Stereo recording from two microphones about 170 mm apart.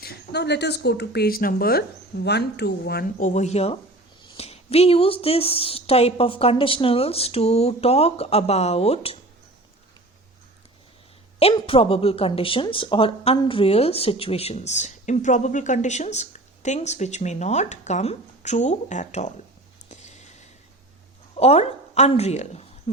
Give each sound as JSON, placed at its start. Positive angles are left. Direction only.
{"t": 0.0, "sound": "speech", "side_deg": 75}
{"t": 11.3, "sound": "speech", "side_deg": 35}
{"t": 19.9, "sound": "a sound", "side_deg": 40}
{"t": 21.3, "sound": "a woman's voice", "side_deg": 40}